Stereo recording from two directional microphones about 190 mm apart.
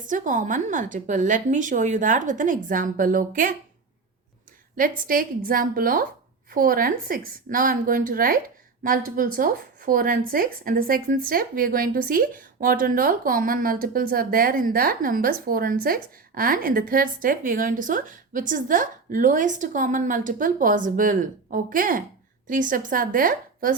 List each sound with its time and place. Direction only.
0.0 s speech: 45° right (ahead or behind)
4.8 s speech: 50° right (ahead or behind)